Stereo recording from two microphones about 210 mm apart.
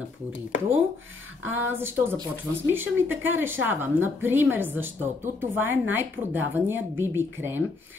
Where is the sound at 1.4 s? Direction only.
10° right (ahead or behind).